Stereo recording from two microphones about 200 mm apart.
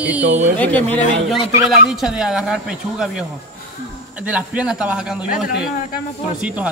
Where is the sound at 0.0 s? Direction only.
5° right (ahead or behind).